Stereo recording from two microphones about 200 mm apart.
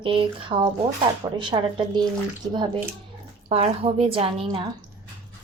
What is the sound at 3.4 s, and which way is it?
Speech, 30° right (ahead or behind).